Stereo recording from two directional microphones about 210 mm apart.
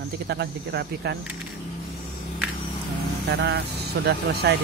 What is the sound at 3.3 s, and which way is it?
Speech, 50° right (ahead or behind).